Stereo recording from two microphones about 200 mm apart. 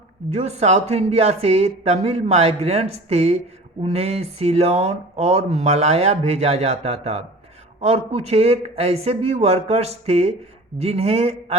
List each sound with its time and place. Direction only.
0.3 s a man's voice: 30° right (ahead or behind)